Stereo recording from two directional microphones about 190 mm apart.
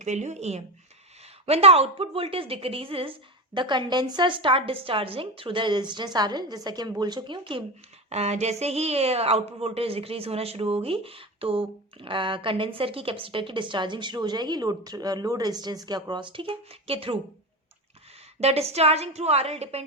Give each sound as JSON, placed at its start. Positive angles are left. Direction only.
{"t": 0.0, "sound": "a woman's voice", "side_deg": -40}
{"t": 18.3, "sound": "a woman's voice", "side_deg": -35}